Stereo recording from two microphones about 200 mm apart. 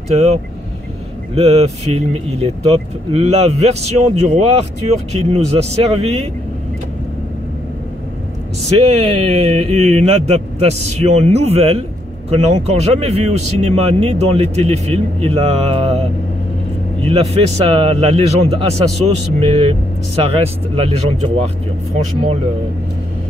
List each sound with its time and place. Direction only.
0.1 s a man's voice: 35° right (ahead or behind)
8.7 s a man's voice: 30° right (ahead or behind)